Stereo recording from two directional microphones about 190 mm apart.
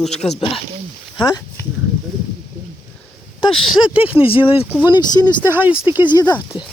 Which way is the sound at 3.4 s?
25° left (ahead or behind).